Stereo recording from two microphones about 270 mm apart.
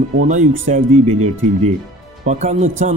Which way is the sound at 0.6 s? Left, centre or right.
Right.